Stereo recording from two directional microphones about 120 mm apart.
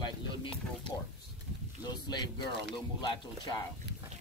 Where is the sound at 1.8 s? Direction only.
35° left (ahead or behind).